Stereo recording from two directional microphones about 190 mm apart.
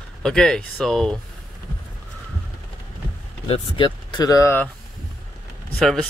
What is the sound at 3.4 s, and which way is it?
Speech, 30° left (ahead or behind).